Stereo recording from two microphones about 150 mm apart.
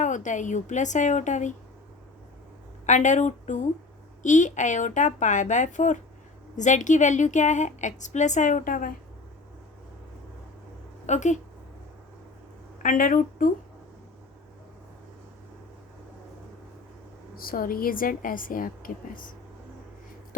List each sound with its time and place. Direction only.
0.0 s a woman's voice: 55° left (ahead or behind)
2.8 s a woman's voice: 55° left (ahead or behind)
11.0 s speech: 50° left (ahead or behind)
12.8 s speech: 65° left (ahead or behind)
17.3 s a woman's voice: 75° left (ahead or behind)